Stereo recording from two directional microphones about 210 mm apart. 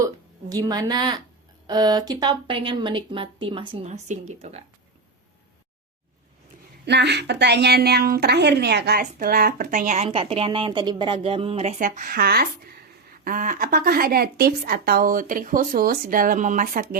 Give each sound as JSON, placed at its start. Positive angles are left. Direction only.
{"t": 0.0, "sound": "a woman's voice", "side_deg": -15}
{"t": 6.8, "sound": "a woman's voice", "side_deg": -55}